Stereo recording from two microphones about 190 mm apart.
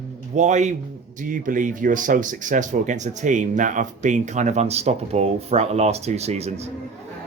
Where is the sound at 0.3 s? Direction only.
40° right (ahead or behind).